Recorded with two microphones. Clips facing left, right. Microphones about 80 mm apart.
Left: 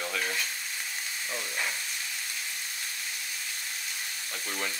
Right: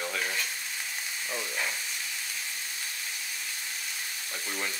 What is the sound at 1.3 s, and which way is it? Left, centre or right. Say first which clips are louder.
Frying: right 1 dB; centre.